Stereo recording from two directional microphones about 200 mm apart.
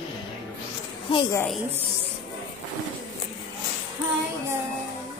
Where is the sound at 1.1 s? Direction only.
25° left (ahead or behind).